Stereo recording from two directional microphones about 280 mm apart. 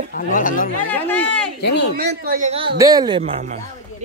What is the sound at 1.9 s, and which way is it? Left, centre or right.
Speech, right.